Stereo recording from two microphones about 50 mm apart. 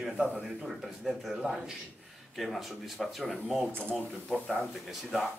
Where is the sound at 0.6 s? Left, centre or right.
Centre.